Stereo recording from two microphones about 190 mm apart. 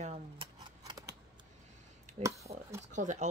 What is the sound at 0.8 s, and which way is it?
Scissors, 20° right (ahead or behind).